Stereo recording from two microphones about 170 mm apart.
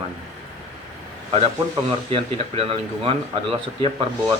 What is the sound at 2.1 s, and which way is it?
Speech, 30° right (ahead or behind).